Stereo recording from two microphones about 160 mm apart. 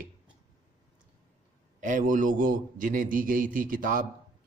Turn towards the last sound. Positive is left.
turn(degrees=-55)  # may be behind; listen again after turning